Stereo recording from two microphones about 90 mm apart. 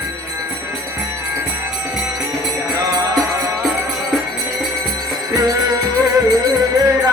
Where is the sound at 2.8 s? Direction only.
40° right (ahead or behind).